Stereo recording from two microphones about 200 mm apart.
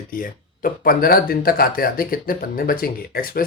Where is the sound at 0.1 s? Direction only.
45° left (ahead or behind).